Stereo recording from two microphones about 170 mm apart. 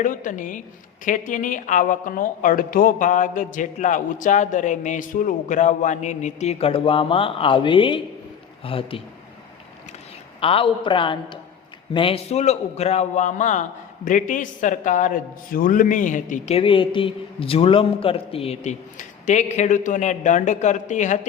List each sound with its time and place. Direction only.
0.0 s a man's voice: 50° left (ahead or behind); by 9.0 s 35° left (ahead or behind)
10.4 s a man's voice: 30° left (ahead or behind); by 16.6 s 50° left (ahead or behind)
16.6 s speech: 30° left (ahead or behind)